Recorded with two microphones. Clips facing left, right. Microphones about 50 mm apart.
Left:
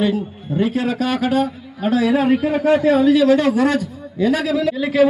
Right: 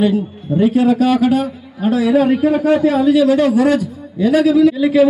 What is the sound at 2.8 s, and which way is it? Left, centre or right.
A man's voice, left.